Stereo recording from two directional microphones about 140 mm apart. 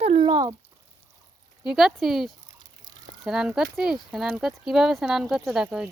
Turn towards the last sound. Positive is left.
turn(degrees=-5)  # may be behind; listen again after turning